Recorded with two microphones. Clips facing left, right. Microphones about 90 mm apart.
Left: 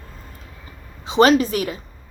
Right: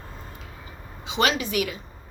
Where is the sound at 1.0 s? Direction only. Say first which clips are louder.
Left 10 dB; 35° left (ahead or behind).